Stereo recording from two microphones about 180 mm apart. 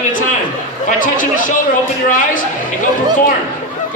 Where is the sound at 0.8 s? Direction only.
45° left (ahead or behind).